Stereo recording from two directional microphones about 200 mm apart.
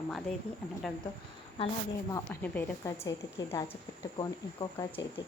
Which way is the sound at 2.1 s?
10° left (ahead or behind).